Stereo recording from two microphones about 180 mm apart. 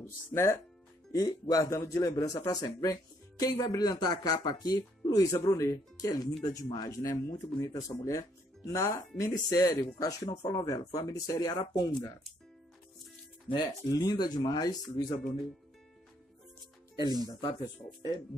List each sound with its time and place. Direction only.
0.0 s speech: 15° left (ahead or behind)
13.5 s speech: 20° left (ahead or behind)
17.3 s speech: 30° left (ahead or behind)